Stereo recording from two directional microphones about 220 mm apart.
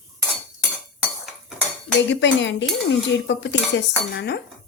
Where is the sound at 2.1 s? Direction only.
55° left (ahead or behind).